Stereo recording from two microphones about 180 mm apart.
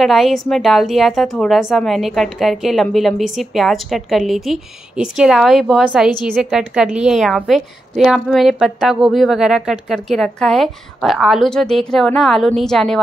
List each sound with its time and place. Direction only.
0.0 s a woman's voice: centre (ahead or behind)